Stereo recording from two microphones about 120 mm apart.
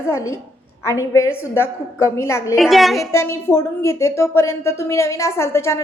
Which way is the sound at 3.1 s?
20° left (ahead or behind).